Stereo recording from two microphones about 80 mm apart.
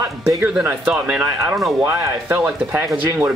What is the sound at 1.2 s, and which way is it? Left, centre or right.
Speech, right.